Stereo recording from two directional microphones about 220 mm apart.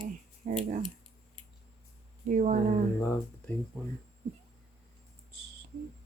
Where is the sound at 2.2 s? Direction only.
35° right (ahead or behind).